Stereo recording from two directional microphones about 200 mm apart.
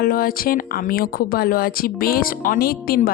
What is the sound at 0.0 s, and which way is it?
Speech, 45° left (ahead or behind).